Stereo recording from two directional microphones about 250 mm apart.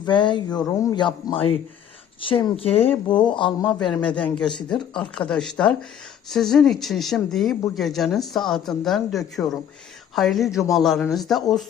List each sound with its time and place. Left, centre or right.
0.0 s a man's voice: centre
3.7 s speech: centre